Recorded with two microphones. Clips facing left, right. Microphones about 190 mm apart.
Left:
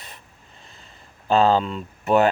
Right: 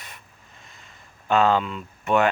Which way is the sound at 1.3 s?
30° left (ahead or behind).